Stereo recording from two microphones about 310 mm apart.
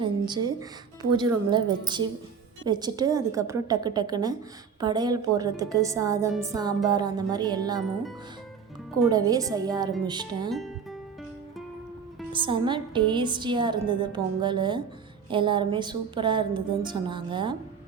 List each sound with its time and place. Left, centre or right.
0.0 s a woman's voice: centre
9.0 s a woman's voice: centre
12.3 s a woman's voice: centre